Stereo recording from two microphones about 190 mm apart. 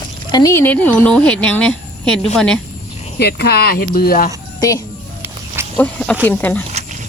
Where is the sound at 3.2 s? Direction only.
55° left (ahead or behind).